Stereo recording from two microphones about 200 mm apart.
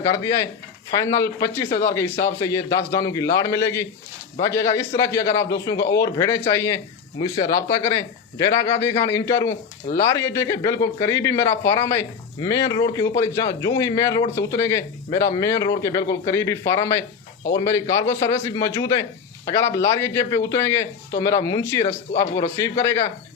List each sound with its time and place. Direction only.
0.1 s speech: 15° left (ahead or behind)